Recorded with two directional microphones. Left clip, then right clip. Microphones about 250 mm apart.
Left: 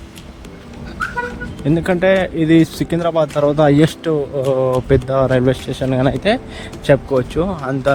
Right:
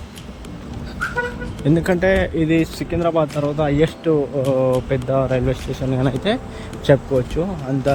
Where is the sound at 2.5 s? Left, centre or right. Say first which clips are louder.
Left 5 dB; left.